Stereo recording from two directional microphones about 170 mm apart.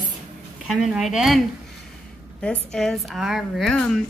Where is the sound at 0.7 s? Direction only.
Centre (ahead or behind).